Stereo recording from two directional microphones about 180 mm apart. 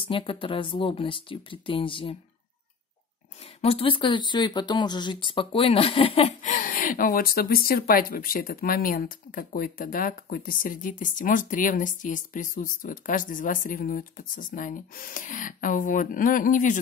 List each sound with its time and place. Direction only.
0.1 s speech: 30° left (ahead or behind)
3.6 s speech: 30° left (ahead or behind); by 16.8 s 45° left (ahead or behind)